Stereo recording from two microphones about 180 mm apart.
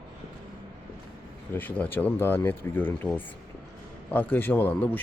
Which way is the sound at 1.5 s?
10° left (ahead or behind).